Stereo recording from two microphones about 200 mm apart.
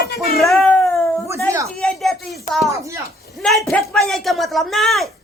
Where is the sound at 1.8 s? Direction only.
Centre (ahead or behind).